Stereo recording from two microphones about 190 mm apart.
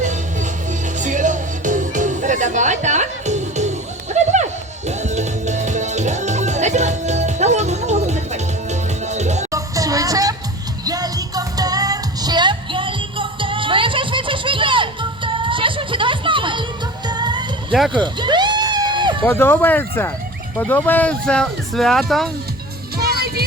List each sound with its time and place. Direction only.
0.9 s music: 40° right (ahead or behind)
9.5 s music: 15° right (ahead or behind)
17.9 s a sound: 25° right (ahead or behind)
19.2 s speech: 10° left (ahead or behind)
23.0 s music: 55° right (ahead or behind)